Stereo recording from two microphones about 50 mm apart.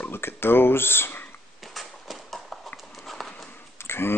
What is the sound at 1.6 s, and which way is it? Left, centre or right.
Horse, centre.